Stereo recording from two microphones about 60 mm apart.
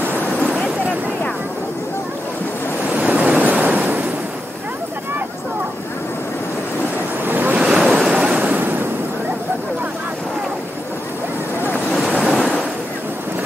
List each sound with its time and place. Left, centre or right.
3.1 s waves: right
7.2 s waves: right
7.5 s waves: centre
8.5 s waves: right
12.2 s waves: centre